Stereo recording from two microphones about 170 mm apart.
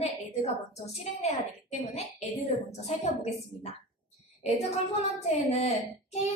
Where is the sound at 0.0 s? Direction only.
40° left (ahead or behind).